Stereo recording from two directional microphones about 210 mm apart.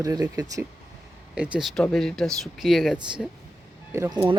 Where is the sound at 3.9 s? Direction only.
15° right (ahead or behind).